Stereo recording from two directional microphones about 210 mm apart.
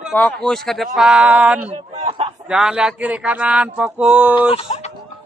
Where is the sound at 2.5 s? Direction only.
5° right (ahead or behind).